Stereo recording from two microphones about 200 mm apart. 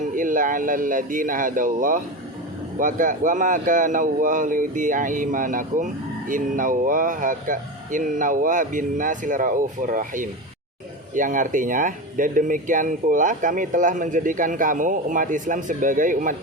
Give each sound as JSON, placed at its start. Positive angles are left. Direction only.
{"t": 0.1, "sound": "speech", "side_deg": -40}